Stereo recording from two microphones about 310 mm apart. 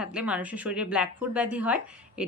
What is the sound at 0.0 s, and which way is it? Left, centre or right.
A woman's voice, centre.